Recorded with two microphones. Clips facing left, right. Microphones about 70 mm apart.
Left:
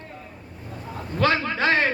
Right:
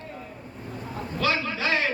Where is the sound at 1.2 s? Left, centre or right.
Left.